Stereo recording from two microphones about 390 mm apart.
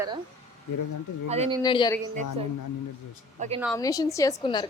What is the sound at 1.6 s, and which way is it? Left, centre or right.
Speech, centre.